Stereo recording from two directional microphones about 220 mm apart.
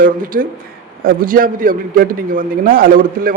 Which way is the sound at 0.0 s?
40° right (ahead or behind).